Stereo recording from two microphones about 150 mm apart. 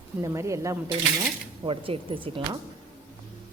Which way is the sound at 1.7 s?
35° right (ahead or behind).